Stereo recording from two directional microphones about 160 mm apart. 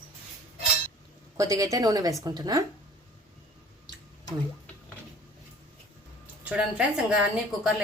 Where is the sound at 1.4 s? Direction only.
20° right (ahead or behind).